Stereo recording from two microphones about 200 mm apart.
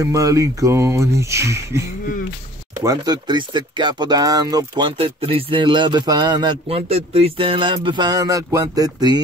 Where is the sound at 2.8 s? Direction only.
20° right (ahead or behind).